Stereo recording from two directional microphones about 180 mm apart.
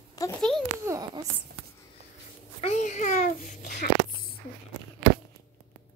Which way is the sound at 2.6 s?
40° left (ahead or behind).